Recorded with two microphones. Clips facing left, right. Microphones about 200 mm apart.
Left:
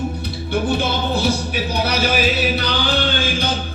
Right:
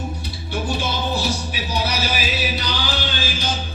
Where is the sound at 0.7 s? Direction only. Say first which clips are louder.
Left 1 dB; 55° left (ahead or behind).